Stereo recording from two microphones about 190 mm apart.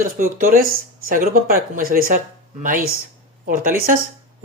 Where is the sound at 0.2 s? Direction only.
50° right (ahead or behind).